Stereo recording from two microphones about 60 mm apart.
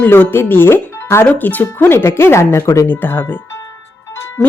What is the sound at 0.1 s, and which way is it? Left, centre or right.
Speech, left.